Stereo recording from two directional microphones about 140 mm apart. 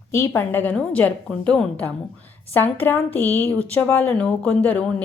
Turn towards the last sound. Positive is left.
turn(degrees=10)  # may be behind; listen again after turning